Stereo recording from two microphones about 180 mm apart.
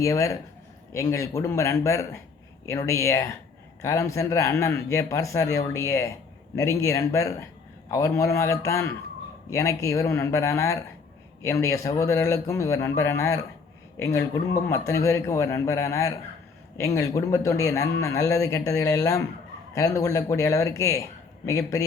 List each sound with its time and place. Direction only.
0.0 s a man's voice: 15° left (ahead or behind)